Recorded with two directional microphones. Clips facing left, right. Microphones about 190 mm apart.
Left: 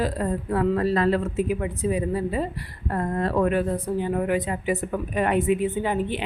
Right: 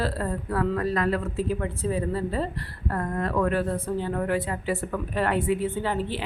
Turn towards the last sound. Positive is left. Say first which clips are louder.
# left 3 dB
turn(degrees=15)  # may be behind; listen again after turning